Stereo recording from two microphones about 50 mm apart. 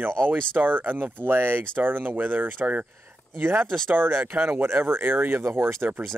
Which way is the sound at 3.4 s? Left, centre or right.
Right.